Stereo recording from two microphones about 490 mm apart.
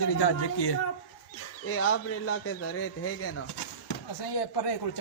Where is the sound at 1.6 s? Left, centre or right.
Left.